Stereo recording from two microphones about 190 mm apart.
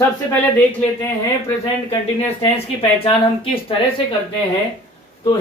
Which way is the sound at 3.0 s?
30° left (ahead or behind).